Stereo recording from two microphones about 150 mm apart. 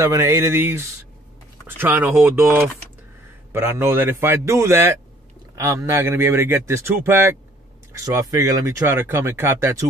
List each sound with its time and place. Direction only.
0.0 s speech: 20° right (ahead or behind)